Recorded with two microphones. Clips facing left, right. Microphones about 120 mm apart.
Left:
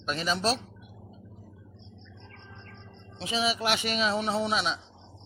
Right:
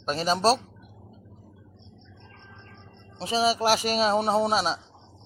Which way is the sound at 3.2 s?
40° right (ahead or behind).